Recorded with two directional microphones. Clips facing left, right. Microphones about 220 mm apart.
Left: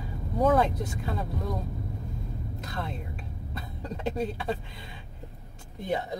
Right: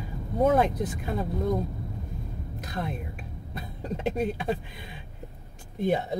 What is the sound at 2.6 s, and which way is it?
Speech, 20° right (ahead or behind).